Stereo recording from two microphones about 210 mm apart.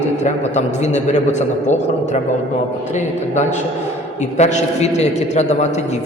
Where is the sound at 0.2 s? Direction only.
35° left (ahead or behind).